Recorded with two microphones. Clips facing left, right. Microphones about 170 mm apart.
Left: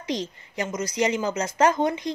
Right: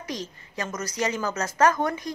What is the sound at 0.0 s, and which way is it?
Speech, 25° left (ahead or behind).